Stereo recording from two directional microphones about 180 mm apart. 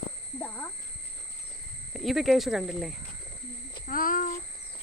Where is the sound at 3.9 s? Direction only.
50° left (ahead or behind).